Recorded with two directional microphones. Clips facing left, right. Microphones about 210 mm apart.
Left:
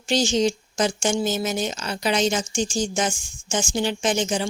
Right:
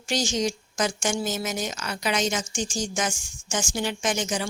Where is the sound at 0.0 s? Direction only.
30° left (ahead or behind).